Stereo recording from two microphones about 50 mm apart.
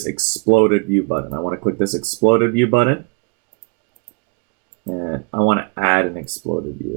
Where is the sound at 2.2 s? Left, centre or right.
Left.